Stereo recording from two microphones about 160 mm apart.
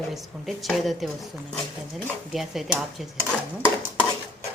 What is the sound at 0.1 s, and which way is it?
Speech, centre (ahead or behind).